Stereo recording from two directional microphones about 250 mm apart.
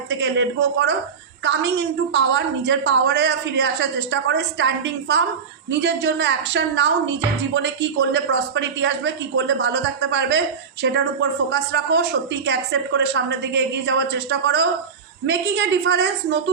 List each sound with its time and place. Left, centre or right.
0.1 s a woman's voice: right